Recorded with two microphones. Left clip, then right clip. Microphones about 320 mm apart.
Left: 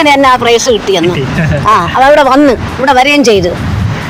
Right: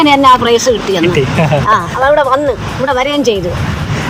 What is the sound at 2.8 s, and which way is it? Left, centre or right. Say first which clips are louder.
Speech: left 7 dB; left.